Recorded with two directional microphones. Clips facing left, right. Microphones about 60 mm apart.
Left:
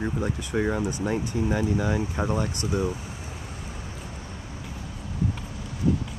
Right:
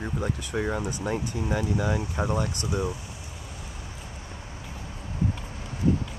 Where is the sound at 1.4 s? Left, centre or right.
Left.